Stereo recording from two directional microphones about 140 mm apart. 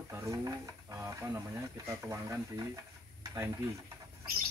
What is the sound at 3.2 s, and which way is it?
Stir, 20° right (ahead or behind).